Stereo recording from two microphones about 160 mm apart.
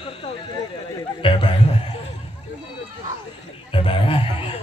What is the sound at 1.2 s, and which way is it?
Speech, 30° left (ahead or behind).